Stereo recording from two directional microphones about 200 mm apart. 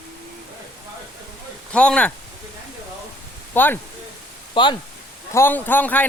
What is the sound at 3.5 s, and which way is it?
Speech, 10° left (ahead or behind).